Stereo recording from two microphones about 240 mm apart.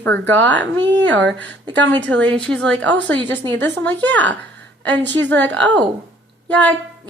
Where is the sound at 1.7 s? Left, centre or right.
Centre.